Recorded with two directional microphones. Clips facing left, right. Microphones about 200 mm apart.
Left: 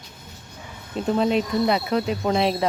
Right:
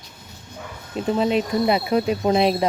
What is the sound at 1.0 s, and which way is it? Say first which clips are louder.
Speech: right 1 dB; centre (ahead or behind).